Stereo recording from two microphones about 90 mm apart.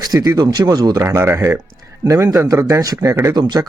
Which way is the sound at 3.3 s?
50° right (ahead or behind).